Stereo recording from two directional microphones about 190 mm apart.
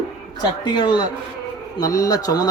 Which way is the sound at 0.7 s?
25° left (ahead or behind).